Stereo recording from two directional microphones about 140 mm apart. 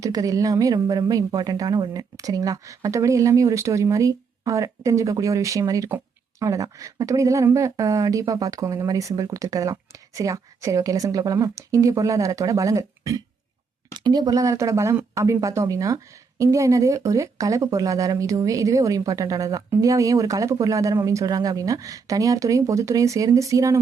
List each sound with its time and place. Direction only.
0.0 s speech: 25° right (ahead or behind)